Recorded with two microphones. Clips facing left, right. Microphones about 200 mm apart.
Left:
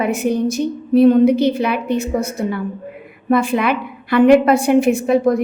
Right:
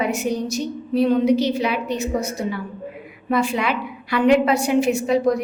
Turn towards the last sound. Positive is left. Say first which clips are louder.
# left 4 dB
turn(degrees=55)  # may be behind; listen again after turning